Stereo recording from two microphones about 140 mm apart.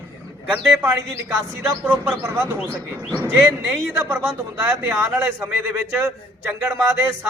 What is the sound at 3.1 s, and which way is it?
A man's voice, 10° right (ahead or behind).